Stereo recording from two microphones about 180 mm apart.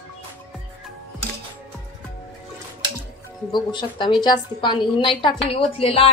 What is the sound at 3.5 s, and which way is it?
A woman's voice, 25° left (ahead or behind).